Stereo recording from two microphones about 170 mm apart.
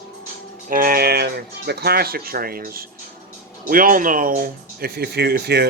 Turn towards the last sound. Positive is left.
turn(degrees=-75)  # may be behind; listen again after turning